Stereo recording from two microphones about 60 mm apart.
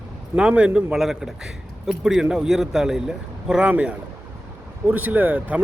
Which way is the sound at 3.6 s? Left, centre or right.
Right.